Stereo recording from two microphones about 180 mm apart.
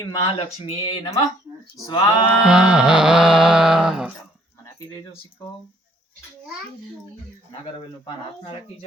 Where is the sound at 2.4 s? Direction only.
5° right (ahead or behind).